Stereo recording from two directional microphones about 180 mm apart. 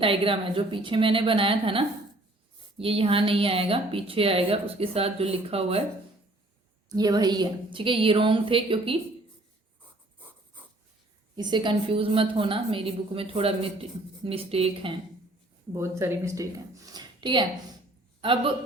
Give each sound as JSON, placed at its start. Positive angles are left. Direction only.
{"t": 0.0, "sound": "a woman's voice", "side_deg": -30}
{"t": 6.8, "sound": "a woman's voice", "side_deg": -20}
{"t": 11.3, "sound": "a woman's voice", "side_deg": -25}
{"t": 15.7, "sound": "a woman's voice", "side_deg": -15}